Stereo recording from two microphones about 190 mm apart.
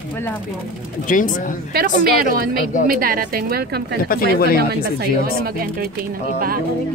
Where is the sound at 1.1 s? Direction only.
45° left (ahead or behind).